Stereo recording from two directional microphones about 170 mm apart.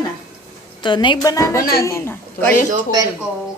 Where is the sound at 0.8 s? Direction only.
25° left (ahead or behind); by 2.6 s 10° left (ahead or behind).